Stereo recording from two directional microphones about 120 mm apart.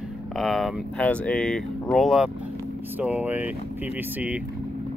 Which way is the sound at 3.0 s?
15° right (ahead or behind).